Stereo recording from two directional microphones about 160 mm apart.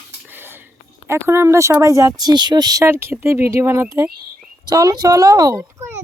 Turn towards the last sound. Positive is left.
turn(degrees=-20)  # may be behind; listen again after turning